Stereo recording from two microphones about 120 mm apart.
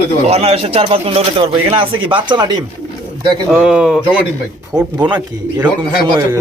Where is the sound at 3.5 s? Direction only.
10° right (ahead or behind).